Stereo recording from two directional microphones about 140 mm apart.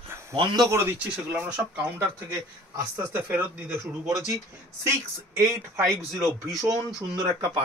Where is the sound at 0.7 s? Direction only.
15° right (ahead or behind).